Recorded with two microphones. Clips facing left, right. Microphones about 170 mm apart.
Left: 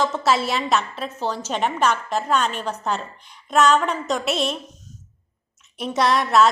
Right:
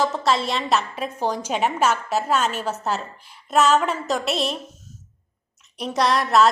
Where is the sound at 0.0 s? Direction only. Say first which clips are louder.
Left 1 dB; centre (ahead or behind).